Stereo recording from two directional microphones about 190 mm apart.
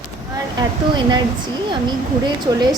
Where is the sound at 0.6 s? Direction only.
20° right (ahead or behind).